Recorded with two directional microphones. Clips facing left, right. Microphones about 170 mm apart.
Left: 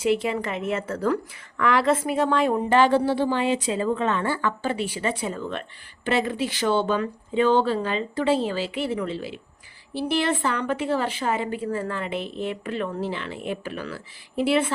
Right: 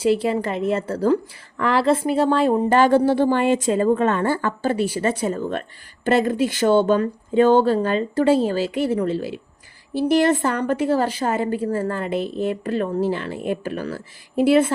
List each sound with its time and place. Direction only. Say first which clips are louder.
0.0 s a woman's voice: right 4 dB; 35° right (ahead or behind)